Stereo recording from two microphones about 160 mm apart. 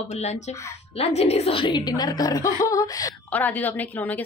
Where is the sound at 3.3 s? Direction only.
10° left (ahead or behind).